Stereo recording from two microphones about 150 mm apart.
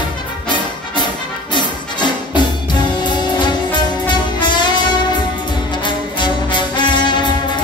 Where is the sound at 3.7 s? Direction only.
30° left (ahead or behind).